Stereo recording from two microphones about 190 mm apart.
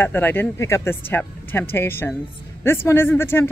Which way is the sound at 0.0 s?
10° left (ahead or behind).